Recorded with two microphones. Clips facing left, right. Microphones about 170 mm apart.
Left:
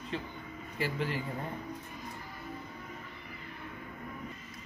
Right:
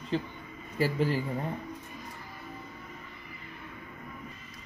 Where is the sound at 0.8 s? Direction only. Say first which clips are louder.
Right 6 dB; 40° right (ahead or behind).